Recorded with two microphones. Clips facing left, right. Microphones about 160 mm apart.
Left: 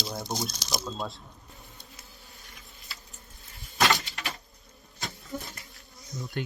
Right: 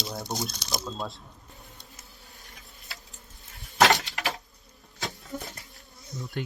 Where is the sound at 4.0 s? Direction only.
85° right.